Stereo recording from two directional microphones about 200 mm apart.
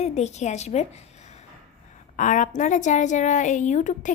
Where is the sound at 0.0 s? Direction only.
35° left (ahead or behind).